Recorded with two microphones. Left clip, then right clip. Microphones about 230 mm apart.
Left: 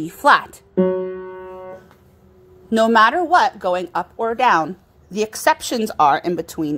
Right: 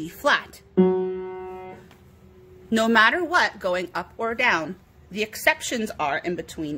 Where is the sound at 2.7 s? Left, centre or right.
Centre; by 6.8 s left.